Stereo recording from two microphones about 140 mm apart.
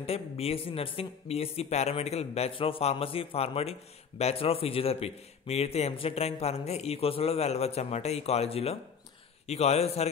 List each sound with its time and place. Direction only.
0.0 s a man's voice: 45° left (ahead or behind)